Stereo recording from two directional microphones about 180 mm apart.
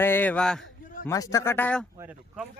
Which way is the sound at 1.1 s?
15° left (ahead or behind).